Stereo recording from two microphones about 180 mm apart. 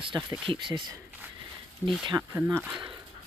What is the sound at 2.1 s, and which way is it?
Speech, 15° right (ahead or behind).